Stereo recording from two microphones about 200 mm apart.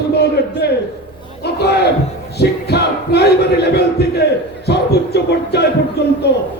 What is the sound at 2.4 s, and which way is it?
Speech, 55° left (ahead or behind).